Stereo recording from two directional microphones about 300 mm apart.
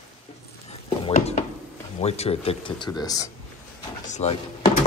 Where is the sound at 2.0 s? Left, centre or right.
Left.